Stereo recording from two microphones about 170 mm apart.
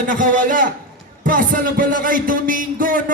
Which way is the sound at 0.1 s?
50° right (ahead or behind).